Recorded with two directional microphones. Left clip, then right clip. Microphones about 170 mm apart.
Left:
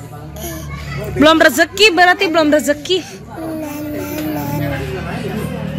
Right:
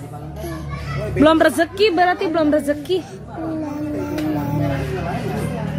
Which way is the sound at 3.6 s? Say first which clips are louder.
Left 1 dB; 15° right (ahead or behind).